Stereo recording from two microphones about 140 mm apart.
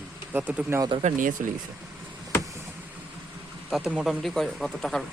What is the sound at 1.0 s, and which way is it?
Speech, 70° right (ahead or behind).